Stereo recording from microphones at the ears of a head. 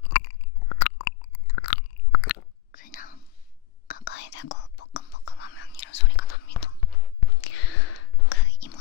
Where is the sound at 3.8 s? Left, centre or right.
Left.